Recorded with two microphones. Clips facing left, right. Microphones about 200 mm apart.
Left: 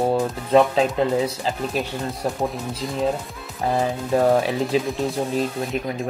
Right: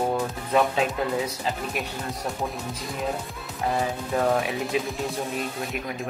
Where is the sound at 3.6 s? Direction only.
30° left (ahead or behind).